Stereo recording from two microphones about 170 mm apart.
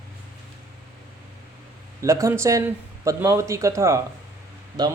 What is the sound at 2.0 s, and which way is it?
A man's voice, 20° right (ahead or behind).